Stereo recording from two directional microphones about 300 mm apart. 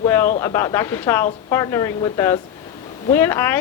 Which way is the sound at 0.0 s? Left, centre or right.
Centre.